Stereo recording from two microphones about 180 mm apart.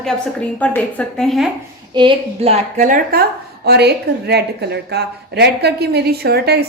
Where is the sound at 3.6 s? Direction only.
65° right (ahead or behind).